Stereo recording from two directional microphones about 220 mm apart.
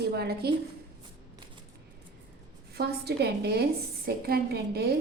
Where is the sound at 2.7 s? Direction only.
45° right (ahead or behind).